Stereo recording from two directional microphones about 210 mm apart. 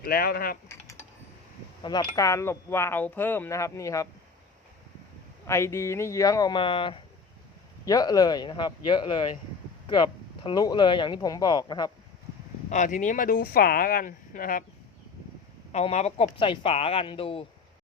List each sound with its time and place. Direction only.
0.0 s speech: 45° left (ahead or behind)
0.7 s typing: 10° left (ahead or behind)
1.8 s speech: 20° left (ahead or behind)
5.5 s speech: 15° left (ahead or behind)
12.7 s speech: 35° left (ahead or behind)
15.7 s speech: 30° left (ahead or behind)